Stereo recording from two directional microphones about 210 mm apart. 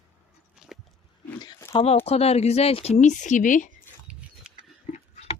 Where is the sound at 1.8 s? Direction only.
30° left (ahead or behind).